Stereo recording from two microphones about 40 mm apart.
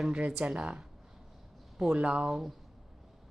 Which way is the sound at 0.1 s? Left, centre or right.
Right.